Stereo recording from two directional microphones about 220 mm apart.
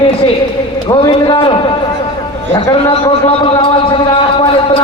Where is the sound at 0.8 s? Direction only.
20° left (ahead or behind).